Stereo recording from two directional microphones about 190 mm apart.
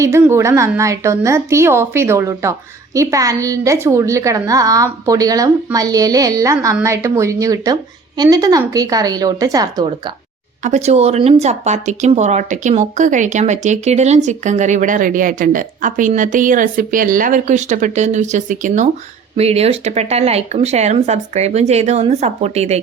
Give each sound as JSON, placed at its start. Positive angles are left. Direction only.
{"t": 0.0, "sound": "a woman's voice", "side_deg": -15}
{"t": 10.6, "sound": "speech", "side_deg": -35}